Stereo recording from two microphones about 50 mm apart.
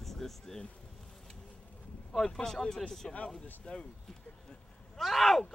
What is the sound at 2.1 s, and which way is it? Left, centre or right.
Speech, centre.